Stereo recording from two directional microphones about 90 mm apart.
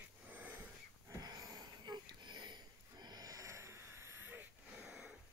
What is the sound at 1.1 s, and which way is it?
Wheeze, 45° right (ahead or behind).